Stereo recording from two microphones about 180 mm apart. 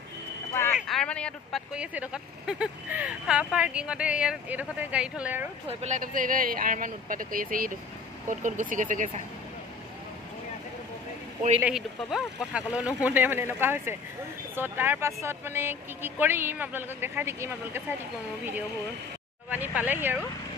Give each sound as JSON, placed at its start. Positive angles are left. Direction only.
{"t": 0.7, "sound": "a sound", "side_deg": 0}
{"t": 1.7, "sound": "speech", "side_deg": -5}
{"t": 5.7, "sound": "speech", "side_deg": -40}
{"t": 11.6, "sound": "speech", "side_deg": 0}
{"t": 19.5, "sound": "speech", "side_deg": -10}